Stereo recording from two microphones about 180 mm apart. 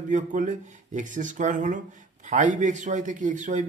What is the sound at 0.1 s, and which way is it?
Speech, 45° right (ahead or behind).